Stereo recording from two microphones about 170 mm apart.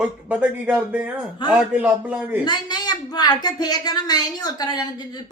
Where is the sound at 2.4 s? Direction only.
25° left (ahead or behind).